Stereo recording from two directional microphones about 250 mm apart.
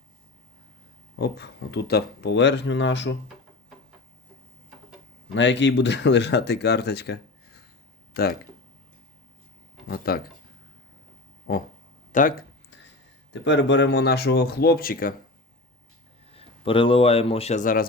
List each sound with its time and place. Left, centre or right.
1.2 s speech: left
5.3 s speech: left
9.8 s speech: left
12.1 s speech: left
13.3 s speech: left
16.3 s speech: left